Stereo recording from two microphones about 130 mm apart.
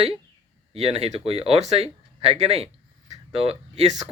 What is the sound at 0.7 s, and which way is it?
Speech, 50° right (ahead or behind).